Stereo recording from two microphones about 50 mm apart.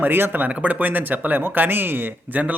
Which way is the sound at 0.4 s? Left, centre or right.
Right.